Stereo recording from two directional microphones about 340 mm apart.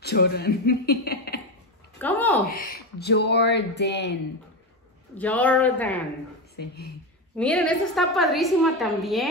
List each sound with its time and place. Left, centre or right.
0.0 s speech: left
2.0 s a woman's voice: centre
2.5 s speech: left
5.1 s a woman's voice: centre
6.6 s speech: left
7.3 s a woman's voice: centre